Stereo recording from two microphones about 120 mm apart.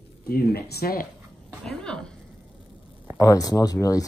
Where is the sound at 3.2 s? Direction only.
30° left (ahead or behind).